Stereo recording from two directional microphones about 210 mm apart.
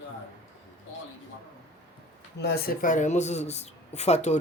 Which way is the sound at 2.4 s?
45° left (ahead or behind).